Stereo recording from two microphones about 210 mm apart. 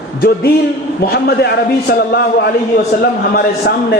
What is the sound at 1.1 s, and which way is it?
A man's voice, 50° left (ahead or behind).